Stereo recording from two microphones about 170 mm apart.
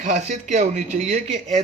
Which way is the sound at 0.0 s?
45° right (ahead or behind).